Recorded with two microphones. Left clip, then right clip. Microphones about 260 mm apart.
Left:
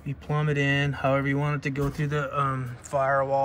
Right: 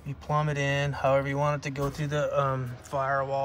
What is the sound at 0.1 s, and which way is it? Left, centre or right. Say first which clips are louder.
Speech: even; centre.